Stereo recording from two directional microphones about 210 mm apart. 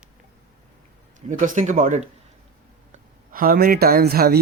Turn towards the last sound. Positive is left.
turn(degrees=-50)  # may be behind; listen again after turning